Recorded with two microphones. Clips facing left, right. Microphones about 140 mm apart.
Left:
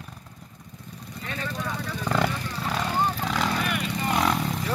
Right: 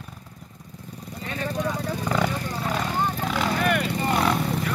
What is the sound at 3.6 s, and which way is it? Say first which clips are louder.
Vehicle: right 6 dB; 55° right (ahead or behind).